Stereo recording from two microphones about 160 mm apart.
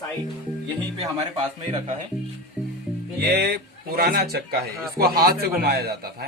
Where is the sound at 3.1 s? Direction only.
80° right.